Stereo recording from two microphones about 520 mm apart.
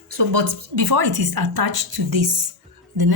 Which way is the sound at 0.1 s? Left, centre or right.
Right.